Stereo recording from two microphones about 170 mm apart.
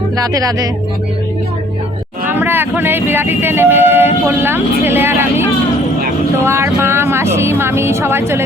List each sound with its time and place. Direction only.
0.2 s speech: 20° right (ahead or behind)
2.2 s speech: 10° right (ahead or behind)